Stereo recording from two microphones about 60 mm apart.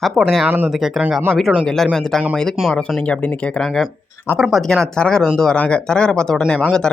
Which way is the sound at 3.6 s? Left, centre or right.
Centre.